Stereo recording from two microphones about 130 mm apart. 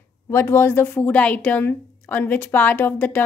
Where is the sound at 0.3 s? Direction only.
20° left (ahead or behind).